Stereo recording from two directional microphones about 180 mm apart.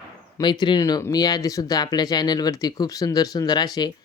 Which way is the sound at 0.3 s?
25° left (ahead or behind).